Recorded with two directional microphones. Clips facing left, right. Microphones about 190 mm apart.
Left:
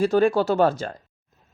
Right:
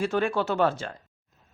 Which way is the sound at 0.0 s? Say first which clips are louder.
Left 7 dB; 35° left (ahead or behind).